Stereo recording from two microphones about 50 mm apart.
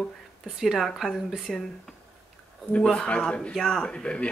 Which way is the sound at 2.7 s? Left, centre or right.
Centre.